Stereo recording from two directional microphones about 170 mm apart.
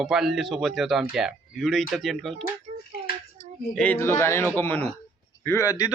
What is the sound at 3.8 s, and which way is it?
A man's voice, 10° left (ahead or behind).